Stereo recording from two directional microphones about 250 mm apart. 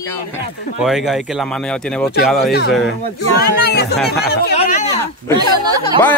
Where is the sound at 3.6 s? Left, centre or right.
Left.